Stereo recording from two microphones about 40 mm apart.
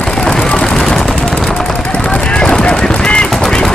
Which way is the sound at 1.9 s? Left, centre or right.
Left.